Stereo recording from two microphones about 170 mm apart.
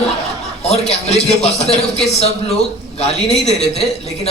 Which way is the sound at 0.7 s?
40° left (ahead or behind).